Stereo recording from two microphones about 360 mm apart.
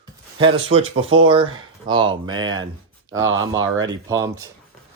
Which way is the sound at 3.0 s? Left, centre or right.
Right.